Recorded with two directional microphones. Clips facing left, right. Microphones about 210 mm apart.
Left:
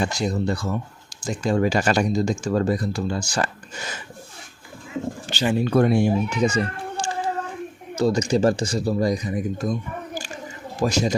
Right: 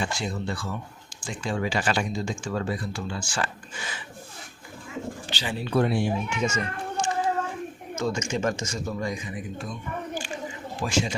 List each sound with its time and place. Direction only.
0.0 s speech: 40° left (ahead or behind)
5.3 s speech: 45° left (ahead or behind)
10.2 s a sound: 40° left (ahead or behind)